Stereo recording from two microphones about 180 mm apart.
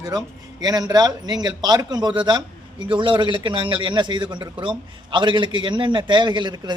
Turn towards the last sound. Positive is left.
turn(degrees=-25)  # may be behind; listen again after turning